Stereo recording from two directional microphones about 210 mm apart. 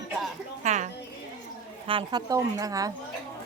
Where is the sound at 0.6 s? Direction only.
35° right (ahead or behind).